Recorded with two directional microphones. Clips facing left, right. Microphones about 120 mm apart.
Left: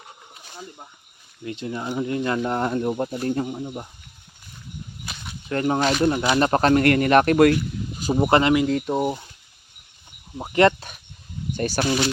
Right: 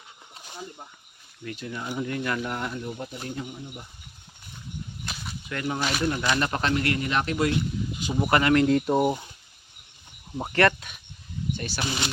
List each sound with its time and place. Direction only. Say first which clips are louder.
1.5 s speech: left 5 dB; 25° left (ahead or behind); by 3.8 s 45° left (ahead or behind)
5.0 s a sound: even; centre (ahead or behind)
5.5 s speech: left 8 dB; 40° left (ahead or behind); by 7.5 s 60° left (ahead or behind)
7.9 s a sound: left 6 dB; 40° left (ahead or behind)
8.2 s speech: left 4 dB; 25° left (ahead or behind)
8.5 s speech: even; centre (ahead or behind)
10.5 s speech: left 5 dB; 20° left (ahead or behind)
10.8 s speech: left 4 dB; 40° left (ahead or behind)